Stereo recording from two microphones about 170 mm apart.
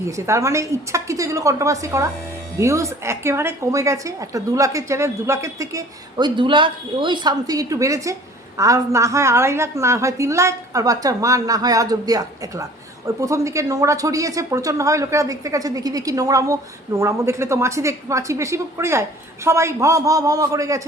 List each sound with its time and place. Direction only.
0.0 s a woman's voice: 15° right (ahead or behind)